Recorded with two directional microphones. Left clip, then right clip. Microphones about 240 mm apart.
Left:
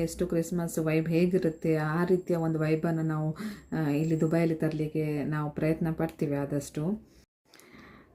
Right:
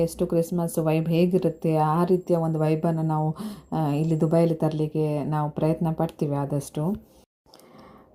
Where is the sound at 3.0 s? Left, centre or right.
Centre.